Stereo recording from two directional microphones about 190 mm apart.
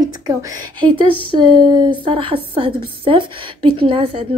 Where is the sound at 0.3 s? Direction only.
20° right (ahead or behind).